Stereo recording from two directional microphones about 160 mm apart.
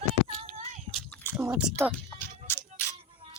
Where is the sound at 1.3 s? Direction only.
20° right (ahead or behind).